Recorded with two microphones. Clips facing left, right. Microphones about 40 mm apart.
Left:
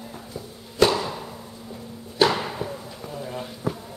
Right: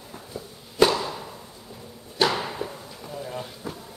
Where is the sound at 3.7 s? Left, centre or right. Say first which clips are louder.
Left 11 dB; left.